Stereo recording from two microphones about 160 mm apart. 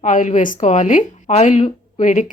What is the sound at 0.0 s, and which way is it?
Speech, 50° left (ahead or behind).